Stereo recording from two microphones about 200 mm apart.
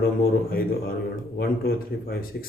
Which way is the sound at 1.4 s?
50° left (ahead or behind).